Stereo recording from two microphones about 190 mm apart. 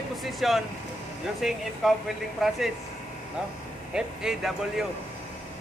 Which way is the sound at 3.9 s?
5° right (ahead or behind).